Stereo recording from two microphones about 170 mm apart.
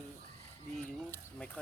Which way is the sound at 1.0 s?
15° left (ahead or behind).